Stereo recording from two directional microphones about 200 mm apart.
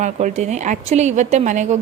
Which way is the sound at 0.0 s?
35° right (ahead or behind).